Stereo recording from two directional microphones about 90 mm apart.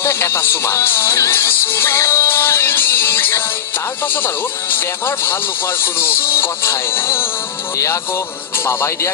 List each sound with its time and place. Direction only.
0.0 s music: 30° left (ahead or behind)
4.1 s a man's voice: 25° left (ahead or behind)